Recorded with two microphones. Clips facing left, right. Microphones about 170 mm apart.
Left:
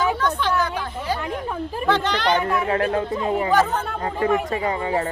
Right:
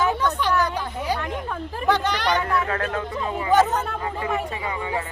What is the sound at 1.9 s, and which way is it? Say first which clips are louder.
Speech: even; 10° right (ahead or behind).